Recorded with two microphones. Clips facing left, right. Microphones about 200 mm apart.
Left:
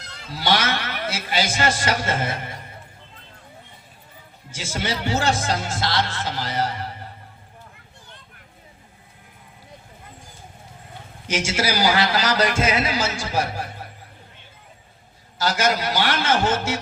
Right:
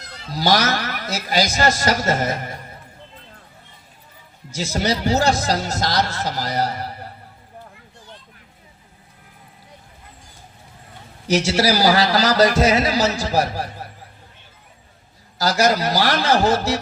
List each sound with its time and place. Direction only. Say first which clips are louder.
0.3 s speech: right 4 dB; 40° right (ahead or behind)
4.5 s speech: right 6 dB; 40° right (ahead or behind)
11.3 s speech: right 6 dB; 40° right (ahead or behind)
15.4 s speech: right 4 dB; 40° right (ahead or behind)